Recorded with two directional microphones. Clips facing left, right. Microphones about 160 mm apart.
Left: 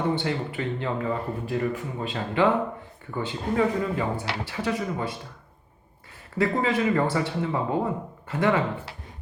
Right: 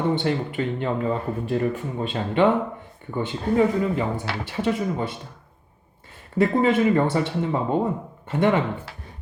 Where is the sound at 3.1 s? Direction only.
20° right (ahead or behind).